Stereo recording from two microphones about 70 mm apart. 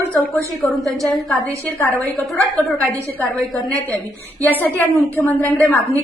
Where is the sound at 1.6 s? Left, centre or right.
Left.